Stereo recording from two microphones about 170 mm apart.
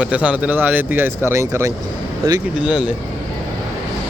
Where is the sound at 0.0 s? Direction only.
5° right (ahead or behind).